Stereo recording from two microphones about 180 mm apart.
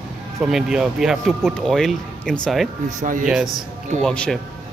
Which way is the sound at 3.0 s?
50° right (ahead or behind).